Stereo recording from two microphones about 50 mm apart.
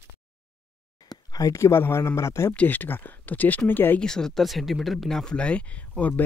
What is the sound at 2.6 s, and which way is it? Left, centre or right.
Speech, left.